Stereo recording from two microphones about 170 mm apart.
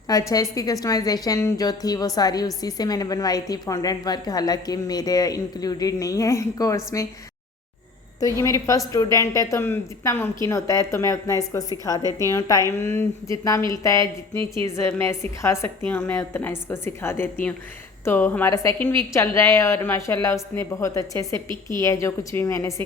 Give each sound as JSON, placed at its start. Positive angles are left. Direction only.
{"t": 0.1, "sound": "a woman's voice", "side_deg": 20}
{"t": 8.4, "sound": "a woman's voice", "side_deg": 20}